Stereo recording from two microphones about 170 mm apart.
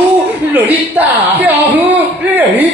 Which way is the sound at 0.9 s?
10° right (ahead or behind).